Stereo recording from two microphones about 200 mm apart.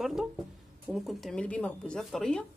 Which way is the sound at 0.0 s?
Centre (ahead or behind).